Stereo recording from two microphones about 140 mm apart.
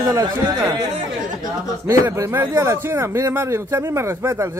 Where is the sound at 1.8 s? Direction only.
20° right (ahead or behind).